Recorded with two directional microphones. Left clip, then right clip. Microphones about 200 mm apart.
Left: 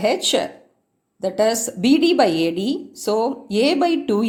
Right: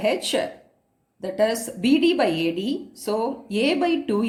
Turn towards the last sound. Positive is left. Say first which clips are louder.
# left 4 dB
turn(degrees=40)  # may be behind; listen again after turning